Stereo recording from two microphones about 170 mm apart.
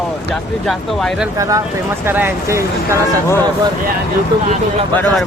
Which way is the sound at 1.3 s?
20° right (ahead or behind).